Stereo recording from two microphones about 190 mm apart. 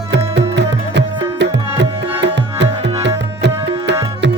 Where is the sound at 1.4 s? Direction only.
65° right (ahead or behind).